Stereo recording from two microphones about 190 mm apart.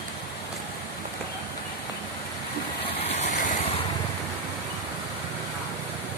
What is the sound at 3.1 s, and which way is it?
Vehicle, 35° left (ahead or behind).